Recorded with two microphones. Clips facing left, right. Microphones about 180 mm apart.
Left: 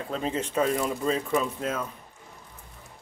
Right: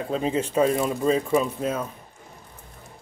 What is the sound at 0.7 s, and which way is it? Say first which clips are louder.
Speech: right 4 dB; 25° right (ahead or behind).